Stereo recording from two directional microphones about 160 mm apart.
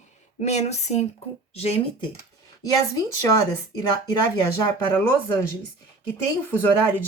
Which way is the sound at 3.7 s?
25° left (ahead or behind).